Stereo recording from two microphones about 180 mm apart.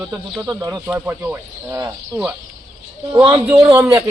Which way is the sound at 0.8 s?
10° right (ahead or behind).